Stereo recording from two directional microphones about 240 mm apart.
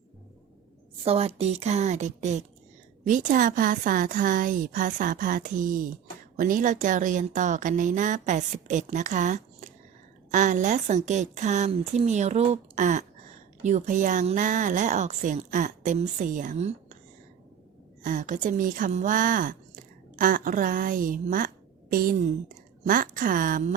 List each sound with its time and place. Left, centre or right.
1.0 s a woman's voice: right
18.0 s a woman's voice: right